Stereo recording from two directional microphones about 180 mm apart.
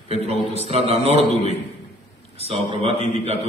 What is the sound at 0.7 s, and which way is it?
Speech, 35° right (ahead or behind).